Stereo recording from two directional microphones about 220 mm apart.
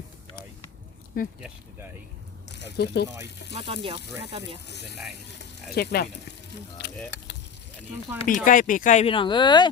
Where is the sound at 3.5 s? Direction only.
25° right (ahead or behind).